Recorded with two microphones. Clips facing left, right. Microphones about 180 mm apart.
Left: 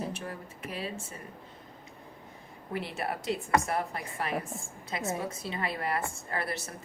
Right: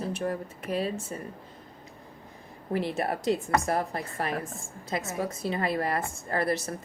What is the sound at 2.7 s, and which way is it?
A woman's voice, 40° right (ahead or behind).